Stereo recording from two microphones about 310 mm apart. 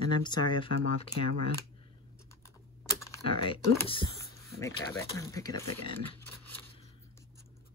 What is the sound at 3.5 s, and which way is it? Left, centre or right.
Speech, centre.